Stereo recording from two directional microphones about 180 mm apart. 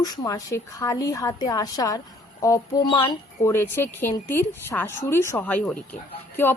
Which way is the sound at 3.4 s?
15° left (ahead or behind).